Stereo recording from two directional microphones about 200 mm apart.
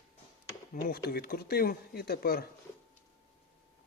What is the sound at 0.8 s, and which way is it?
Speech, 50° left (ahead or behind).